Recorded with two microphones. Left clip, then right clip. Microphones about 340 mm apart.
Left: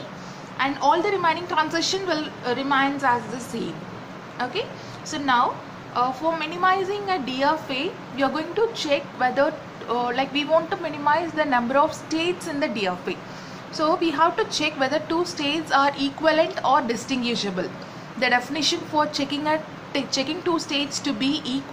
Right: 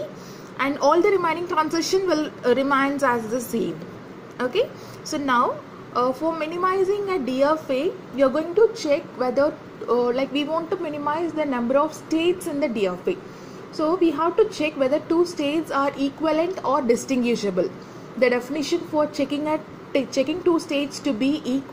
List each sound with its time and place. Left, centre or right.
0.6 s a woman's voice: right
5.1 s a woman's voice: right